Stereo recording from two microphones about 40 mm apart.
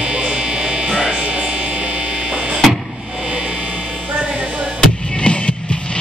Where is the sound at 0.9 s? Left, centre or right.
Centre.